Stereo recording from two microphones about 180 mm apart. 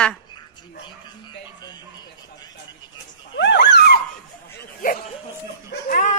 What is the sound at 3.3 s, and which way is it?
Dog, 75° left (ahead or behind).